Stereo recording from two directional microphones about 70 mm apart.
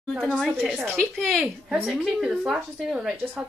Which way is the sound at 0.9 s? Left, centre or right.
Centre.